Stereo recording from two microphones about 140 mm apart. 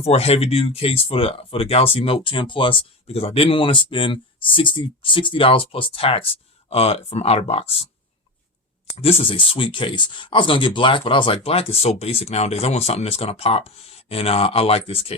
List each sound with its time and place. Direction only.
0.0 s speech: 45° left (ahead or behind)
9.0 s speech: 45° left (ahead or behind)